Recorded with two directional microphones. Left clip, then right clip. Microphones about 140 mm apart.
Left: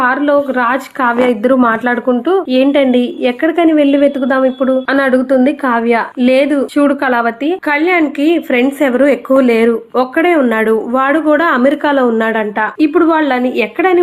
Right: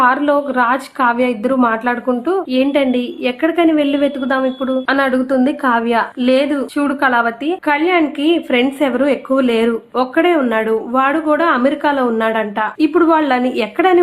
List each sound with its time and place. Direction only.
0.0 s a woman's voice: 5° left (ahead or behind)